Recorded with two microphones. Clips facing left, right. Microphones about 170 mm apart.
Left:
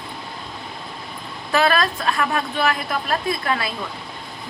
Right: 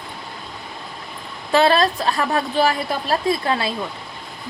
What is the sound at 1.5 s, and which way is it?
A woman's voice, 30° right (ahead or behind).